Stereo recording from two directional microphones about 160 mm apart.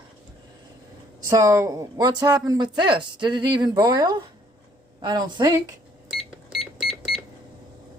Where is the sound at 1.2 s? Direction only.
20° right (ahead or behind).